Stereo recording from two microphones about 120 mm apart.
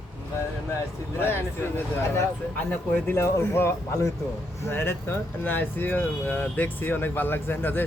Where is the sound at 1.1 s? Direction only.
20° left (ahead or behind).